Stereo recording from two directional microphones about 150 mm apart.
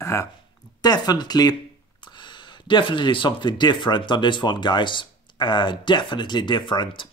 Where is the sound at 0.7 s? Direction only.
25° left (ahead or behind).